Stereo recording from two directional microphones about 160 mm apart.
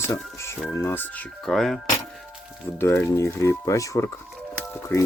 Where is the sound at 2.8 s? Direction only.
15° left (ahead or behind).